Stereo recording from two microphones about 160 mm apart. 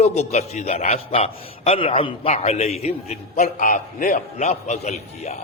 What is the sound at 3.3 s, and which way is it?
A man's voice, 55° left (ahead or behind).